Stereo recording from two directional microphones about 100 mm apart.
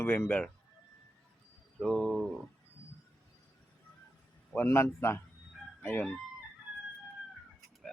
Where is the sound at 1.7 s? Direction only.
5° left (ahead or behind).